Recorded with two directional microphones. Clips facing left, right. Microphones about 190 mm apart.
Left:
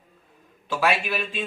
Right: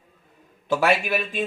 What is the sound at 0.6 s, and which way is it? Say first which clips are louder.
Speech: right 3 dB; 45° right (ahead or behind).